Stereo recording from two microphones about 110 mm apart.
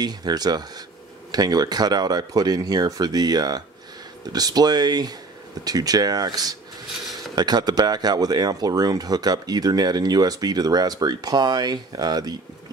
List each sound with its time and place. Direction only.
0.0 s speech: 40° right (ahead or behind)